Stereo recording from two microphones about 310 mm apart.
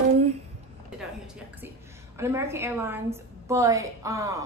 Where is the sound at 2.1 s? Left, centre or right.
Centre.